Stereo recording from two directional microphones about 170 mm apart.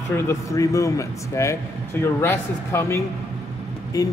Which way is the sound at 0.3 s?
20° left (ahead or behind).